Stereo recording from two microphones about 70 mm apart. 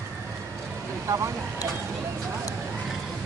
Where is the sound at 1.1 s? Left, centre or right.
Right.